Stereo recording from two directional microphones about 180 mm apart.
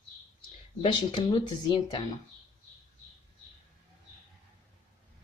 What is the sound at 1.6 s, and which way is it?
Speech, 30° left (ahead or behind).